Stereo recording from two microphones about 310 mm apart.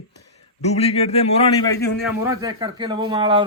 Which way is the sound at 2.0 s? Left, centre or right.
Centre.